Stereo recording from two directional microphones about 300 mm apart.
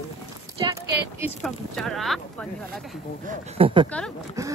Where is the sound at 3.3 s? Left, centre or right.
Right.